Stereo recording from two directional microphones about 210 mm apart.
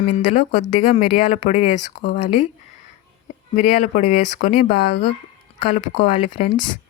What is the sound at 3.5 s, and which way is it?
Speech, 35° left (ahead or behind).